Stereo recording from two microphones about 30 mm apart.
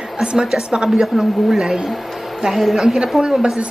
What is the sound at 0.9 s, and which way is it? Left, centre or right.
A woman's voice, centre.